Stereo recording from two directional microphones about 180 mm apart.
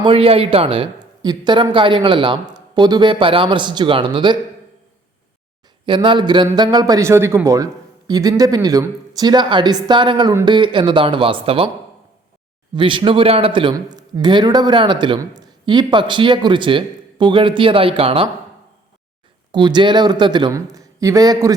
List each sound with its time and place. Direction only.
0.0 s speech: 30° right (ahead or behind)
5.8 s speech: 25° right (ahead or behind)
12.7 s speech: 25° right (ahead or behind)
19.5 s speech: 25° right (ahead or behind)